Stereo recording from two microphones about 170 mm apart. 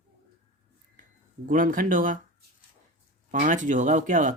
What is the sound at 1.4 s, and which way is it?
Speech, 55° right (ahead or behind).